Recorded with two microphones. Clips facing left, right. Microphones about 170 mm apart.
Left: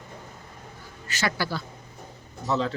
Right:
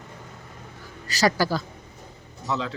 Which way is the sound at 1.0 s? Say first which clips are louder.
Right 6 dB; 35° right (ahead or behind).